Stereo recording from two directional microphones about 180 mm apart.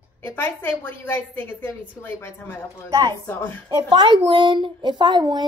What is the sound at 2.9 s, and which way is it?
Speech, 20° right (ahead or behind).